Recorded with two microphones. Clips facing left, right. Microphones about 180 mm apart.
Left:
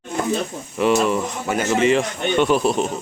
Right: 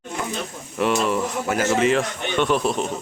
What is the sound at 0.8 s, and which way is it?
A man's voice, centre (ahead or behind).